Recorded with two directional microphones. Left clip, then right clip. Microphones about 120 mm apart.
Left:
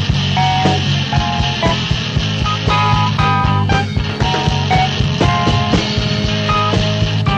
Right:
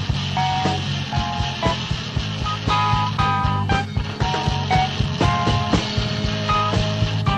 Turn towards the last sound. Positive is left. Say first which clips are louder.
# left 5 dB
turn(degrees=25)  # may be behind; listen again after turning